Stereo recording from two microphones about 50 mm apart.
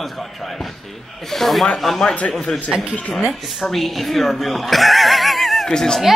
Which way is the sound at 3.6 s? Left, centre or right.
Centre.